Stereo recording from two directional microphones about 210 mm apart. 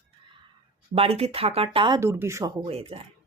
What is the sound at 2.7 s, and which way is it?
Speech, 30° right (ahead or behind).